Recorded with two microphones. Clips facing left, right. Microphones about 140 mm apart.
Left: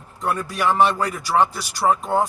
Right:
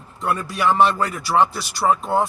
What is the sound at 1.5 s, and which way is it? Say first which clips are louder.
Speech: right 2 dB; 45° left (ahead or behind).